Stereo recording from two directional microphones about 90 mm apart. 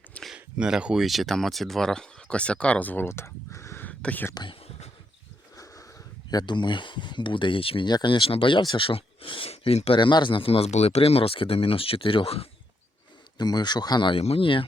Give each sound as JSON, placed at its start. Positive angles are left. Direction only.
{"t": 0.3, "sound": "speech", "side_deg": -10}
{"t": 3.8, "sound": "whispering", "side_deg": 20}
{"t": 6.3, "sound": "speech", "side_deg": 60}
{"t": 7.9, "sound": "speech", "side_deg": 55}
{"t": 13.4, "sound": "speech", "side_deg": 50}
{"t": 14.1, "sound": "speech", "side_deg": 90}